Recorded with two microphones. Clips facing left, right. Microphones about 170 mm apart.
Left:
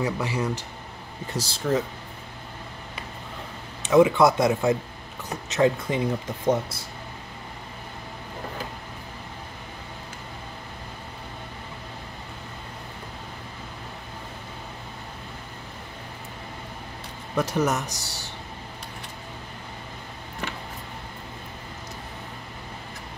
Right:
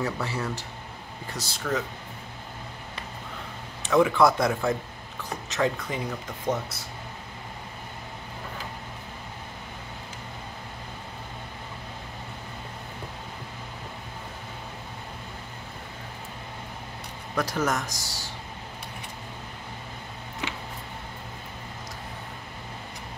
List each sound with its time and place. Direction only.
0.0 s speech: 15° left (ahead or behind)
1.3 s speech: 30° left (ahead or behind)
3.9 s speech: 20° left (ahead or behind)
17.4 s speech: 20° left (ahead or behind)